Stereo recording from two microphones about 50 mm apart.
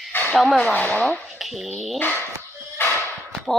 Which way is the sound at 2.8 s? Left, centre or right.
Left.